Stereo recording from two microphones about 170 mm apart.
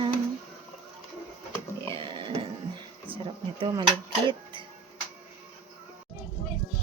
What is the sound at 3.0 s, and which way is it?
Speech, 30° right (ahead or behind).